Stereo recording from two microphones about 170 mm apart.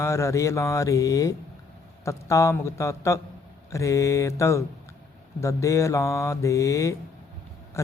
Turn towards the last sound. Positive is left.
turn(degrees=15)  # may be behind; listen again after turning